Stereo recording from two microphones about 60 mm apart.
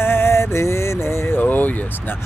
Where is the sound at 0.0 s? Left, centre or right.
Left.